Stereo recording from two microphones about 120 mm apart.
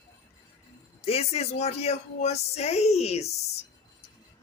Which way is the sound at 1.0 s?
55° left (ahead or behind).